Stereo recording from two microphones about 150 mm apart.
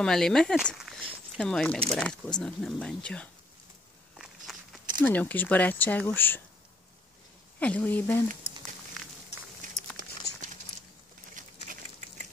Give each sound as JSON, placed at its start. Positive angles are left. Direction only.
{"t": 0.0, "sound": "speech", "side_deg": 5}
{"t": 4.5, "sound": "walk", "side_deg": 0}
{"t": 5.0, "sound": "speech", "side_deg": 10}
{"t": 7.6, "sound": "speech", "side_deg": 10}
{"t": 9.6, "sound": "a sound", "side_deg": -60}